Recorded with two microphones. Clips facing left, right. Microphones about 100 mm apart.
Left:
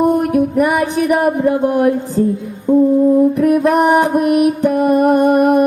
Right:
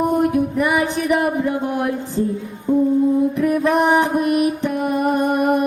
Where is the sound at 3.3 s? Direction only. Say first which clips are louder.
Left 5 dB; 55° left (ahead or behind).